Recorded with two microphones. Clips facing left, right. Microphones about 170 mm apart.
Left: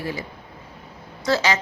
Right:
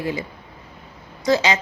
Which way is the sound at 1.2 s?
15° right (ahead or behind).